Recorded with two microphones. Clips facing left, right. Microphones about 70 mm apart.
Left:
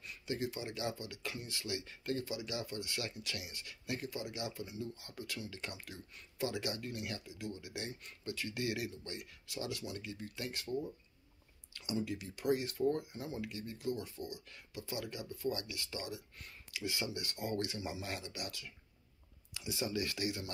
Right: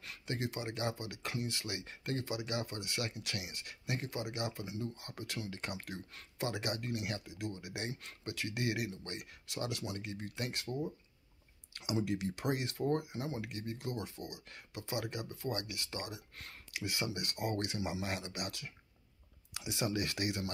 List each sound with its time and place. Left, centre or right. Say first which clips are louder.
0.3 s speech: even; right
11.8 s speech: right 4 dB; right